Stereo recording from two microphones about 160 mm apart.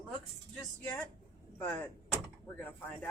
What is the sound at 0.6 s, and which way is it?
Speech, 10° left (ahead or behind).